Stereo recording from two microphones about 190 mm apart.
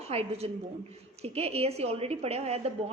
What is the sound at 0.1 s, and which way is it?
A woman's voice, 30° right (ahead or behind).